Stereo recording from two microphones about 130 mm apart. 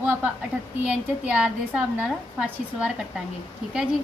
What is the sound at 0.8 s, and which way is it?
A woman's voice, 5° right (ahead or behind).